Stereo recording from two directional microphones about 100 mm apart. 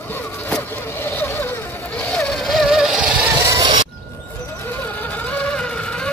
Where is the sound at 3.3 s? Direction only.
25° right (ahead or behind).